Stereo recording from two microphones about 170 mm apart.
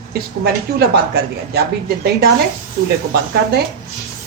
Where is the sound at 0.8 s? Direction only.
65° right (ahead or behind).